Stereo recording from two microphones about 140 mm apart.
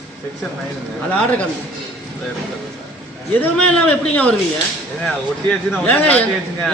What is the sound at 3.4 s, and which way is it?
Speech, 10° left (ahead or behind).